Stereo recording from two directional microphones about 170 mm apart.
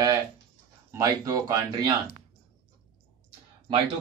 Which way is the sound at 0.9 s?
20° right (ahead or behind).